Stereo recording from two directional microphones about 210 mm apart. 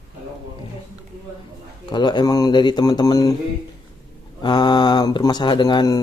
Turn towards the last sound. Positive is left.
turn(degrees=20)  # may be behind; listen again after turning